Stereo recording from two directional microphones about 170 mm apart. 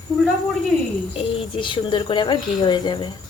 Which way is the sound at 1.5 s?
30° left (ahead or behind).